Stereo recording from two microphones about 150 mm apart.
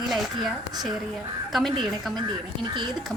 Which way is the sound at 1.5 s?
Centre (ahead or behind).